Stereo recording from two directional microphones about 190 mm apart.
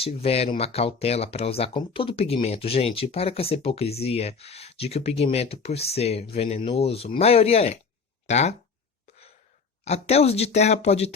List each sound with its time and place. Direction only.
0.0 s speech: 30° left (ahead or behind)
9.8 s speech: 35° left (ahead or behind)